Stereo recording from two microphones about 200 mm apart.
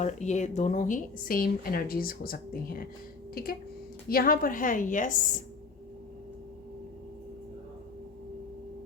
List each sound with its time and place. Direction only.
0.0 s speech: 35° left (ahead or behind)